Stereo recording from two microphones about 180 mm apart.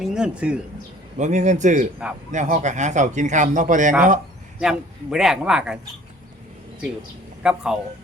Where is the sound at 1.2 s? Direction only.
40° right (ahead or behind).